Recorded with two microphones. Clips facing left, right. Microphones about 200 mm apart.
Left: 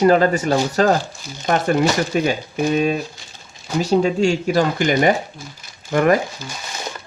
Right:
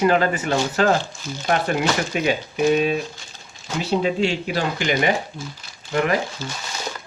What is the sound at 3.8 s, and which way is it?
Speech, 45° left (ahead or behind).